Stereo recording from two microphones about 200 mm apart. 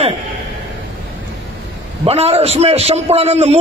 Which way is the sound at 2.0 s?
30° right (ahead or behind).